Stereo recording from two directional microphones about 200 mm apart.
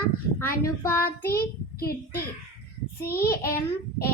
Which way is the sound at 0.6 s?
15° left (ahead or behind).